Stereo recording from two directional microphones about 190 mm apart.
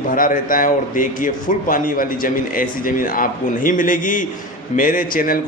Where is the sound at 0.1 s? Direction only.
45° left (ahead or behind).